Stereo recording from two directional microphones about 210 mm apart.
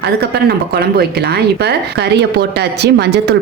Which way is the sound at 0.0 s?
50° right (ahead or behind).